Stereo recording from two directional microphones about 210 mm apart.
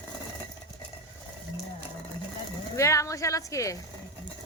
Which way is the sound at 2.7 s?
15° left (ahead or behind).